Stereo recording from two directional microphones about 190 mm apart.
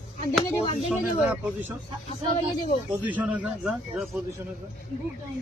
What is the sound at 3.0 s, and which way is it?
A man's voice, 5° right (ahead or behind).